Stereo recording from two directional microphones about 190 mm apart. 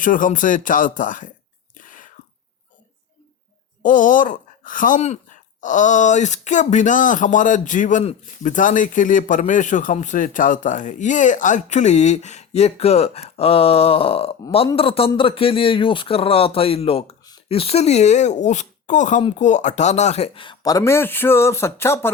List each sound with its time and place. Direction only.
0.0 s speech: 45° left (ahead or behind)
1.7 s whispering: 45° left (ahead or behind)
3.8 s speech: 45° left (ahead or behind); by 22.1 s 15° left (ahead or behind)